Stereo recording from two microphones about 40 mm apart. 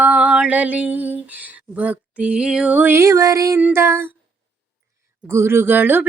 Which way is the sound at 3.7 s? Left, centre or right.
Right.